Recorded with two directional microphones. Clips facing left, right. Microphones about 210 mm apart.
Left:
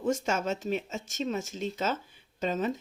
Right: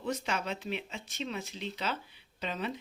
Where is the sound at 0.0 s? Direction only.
45° left (ahead or behind).